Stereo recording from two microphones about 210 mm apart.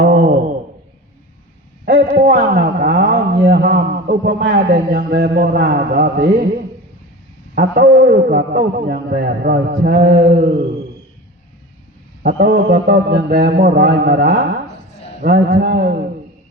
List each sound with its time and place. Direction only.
0.0 s a sound: 45° right (ahead or behind)
1.8 s a man's voice: 50° right (ahead or behind)
7.5 s a man's voice: 45° right (ahead or behind)
12.2 s a man's voice: 50° right (ahead or behind)